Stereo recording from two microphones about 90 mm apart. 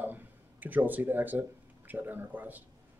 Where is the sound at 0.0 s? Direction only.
20° right (ahead or behind).